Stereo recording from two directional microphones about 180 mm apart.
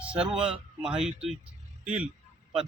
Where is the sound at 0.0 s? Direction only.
5° right (ahead or behind).